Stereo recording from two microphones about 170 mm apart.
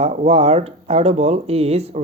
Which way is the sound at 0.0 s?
40° right (ahead or behind).